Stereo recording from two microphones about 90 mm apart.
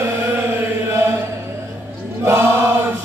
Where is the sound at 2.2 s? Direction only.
30° right (ahead or behind).